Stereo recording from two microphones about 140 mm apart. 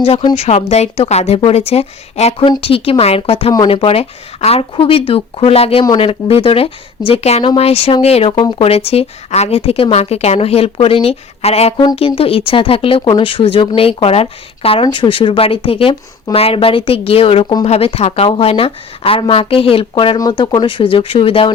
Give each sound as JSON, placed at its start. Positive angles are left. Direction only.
{"t": 0.0, "sound": "speech", "side_deg": 40}